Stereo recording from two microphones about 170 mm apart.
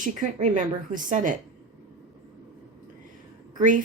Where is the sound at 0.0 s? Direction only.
45° right (ahead or behind).